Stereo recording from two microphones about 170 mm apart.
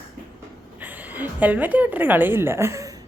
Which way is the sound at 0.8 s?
10° right (ahead or behind).